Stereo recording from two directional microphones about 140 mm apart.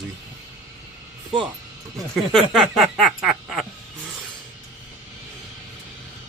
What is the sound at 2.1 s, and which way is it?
Speech, centre (ahead or behind).